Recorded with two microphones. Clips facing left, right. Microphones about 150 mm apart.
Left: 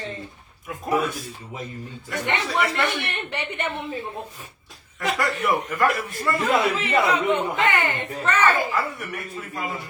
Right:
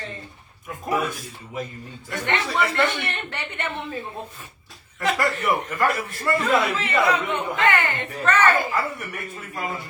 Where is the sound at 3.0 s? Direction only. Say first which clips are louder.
Left 2 dB; 15° left (ahead or behind).